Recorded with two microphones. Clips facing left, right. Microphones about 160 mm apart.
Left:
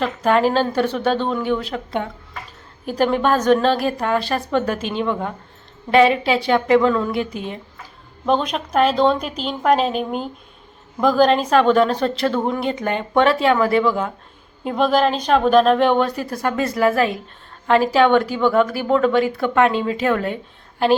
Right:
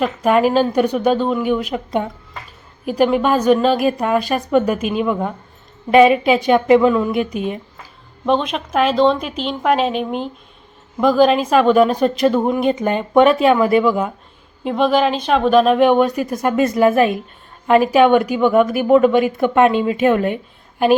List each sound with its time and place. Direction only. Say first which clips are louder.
0.0 s a woman's voice: right 2 dB; 10° right (ahead or behind)
8.3 s a woman's voice: right 1 dB; centre (ahead or behind); by 14.1 s 15° right (ahead or behind)
14.6 s a woman's voice: right 2 dB; centre (ahead or behind)